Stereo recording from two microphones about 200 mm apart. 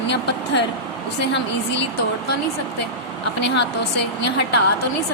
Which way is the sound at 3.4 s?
60° left (ahead or behind).